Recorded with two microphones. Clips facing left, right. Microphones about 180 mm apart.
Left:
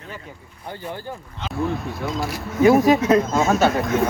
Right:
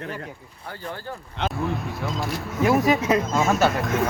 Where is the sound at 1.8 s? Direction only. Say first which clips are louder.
Left 2 dB; centre (ahead or behind).